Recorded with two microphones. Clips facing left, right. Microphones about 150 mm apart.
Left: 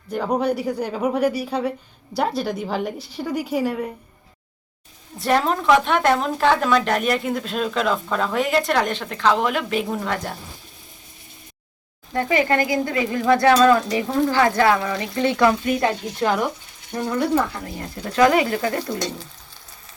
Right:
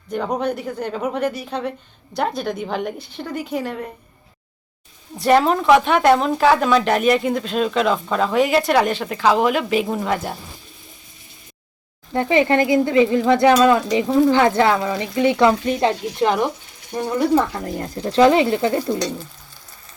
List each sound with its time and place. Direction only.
0.1 s a woman's voice: 5° left (ahead or behind)
5.2 s a woman's voice: 5° right (ahead or behind)
12.1 s a woman's voice: 20° right (ahead or behind)
17.9 s speech: 30° right (ahead or behind)